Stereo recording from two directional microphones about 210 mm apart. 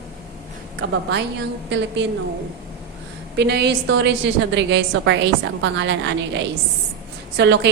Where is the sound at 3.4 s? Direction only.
50° right (ahead or behind).